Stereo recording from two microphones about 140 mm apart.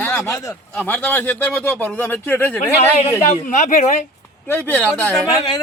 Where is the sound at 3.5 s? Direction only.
55° left (ahead or behind).